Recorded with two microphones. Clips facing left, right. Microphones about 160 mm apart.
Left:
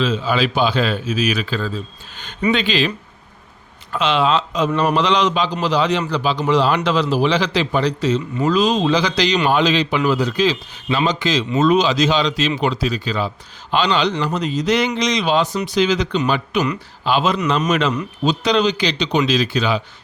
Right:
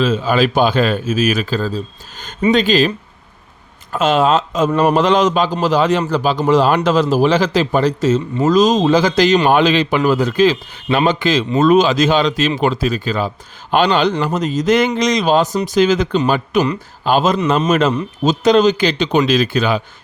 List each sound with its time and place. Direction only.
0.0 s a man's voice: 50° right (ahead or behind)
3.9 s a man's voice: 45° right (ahead or behind)